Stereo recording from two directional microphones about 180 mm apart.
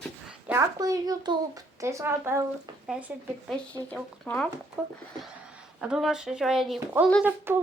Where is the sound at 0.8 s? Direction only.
20° right (ahead or behind).